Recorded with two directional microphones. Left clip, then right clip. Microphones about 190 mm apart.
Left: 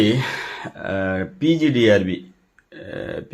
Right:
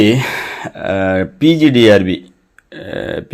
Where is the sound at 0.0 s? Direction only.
30° right (ahead or behind).